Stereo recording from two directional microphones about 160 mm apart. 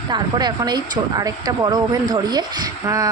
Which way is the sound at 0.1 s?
25° right (ahead or behind).